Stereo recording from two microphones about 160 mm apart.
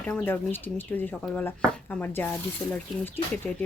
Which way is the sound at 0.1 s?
15° left (ahead or behind).